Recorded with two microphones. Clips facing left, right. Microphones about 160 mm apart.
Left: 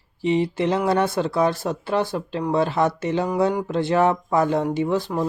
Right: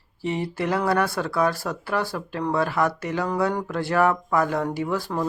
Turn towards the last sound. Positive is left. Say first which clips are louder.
# left 4 dB
turn(degrees=20)  # may be behind; listen again after turning